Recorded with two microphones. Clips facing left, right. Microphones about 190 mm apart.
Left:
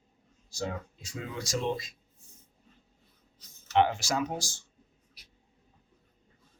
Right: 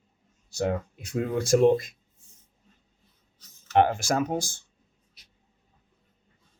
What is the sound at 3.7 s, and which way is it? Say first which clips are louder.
Speech: right 4 dB; 50° right (ahead or behind).